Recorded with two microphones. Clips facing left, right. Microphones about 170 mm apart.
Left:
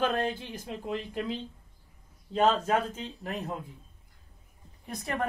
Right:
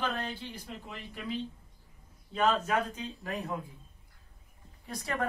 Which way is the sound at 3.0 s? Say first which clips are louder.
Left 1 dB; 25° left (ahead or behind).